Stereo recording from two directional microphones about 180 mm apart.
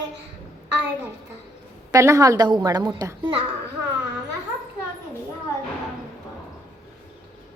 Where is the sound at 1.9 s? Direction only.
15° right (ahead or behind).